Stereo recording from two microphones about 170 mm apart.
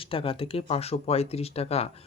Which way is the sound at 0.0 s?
30° left (ahead or behind).